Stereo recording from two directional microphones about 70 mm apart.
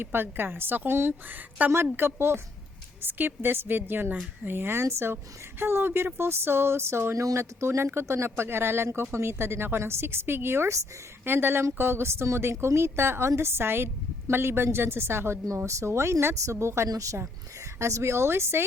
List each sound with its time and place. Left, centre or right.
0.0 s a woman's voice: right
11.3 s a woman's voice: right